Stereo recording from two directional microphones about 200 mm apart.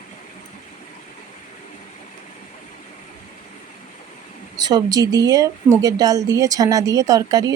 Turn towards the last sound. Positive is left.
turn(degrees=-15)  # may be behind; listen again after turning